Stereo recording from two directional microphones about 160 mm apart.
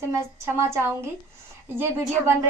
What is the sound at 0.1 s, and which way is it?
A woman's voice, 15° right (ahead or behind).